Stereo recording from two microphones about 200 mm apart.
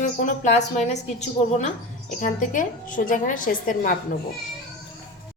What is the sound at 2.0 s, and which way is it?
A woman's voice, 40° left (ahead or behind).